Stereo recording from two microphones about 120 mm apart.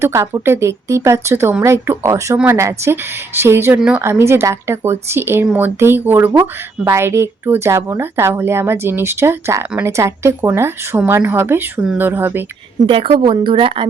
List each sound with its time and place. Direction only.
0.0 s speech: 25° right (ahead or behind)
3.8 s speech: 10° right (ahead or behind)
4.0 s speech: 20° right (ahead or behind)
12.8 s a woman's voice: 50° right (ahead or behind)